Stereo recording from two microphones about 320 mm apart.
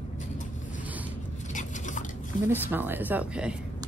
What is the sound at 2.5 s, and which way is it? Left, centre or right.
Speech, centre.